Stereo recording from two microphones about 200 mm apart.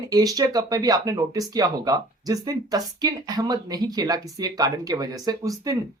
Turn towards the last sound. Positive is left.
turn(degrees=-20)  # may be behind; listen again after turning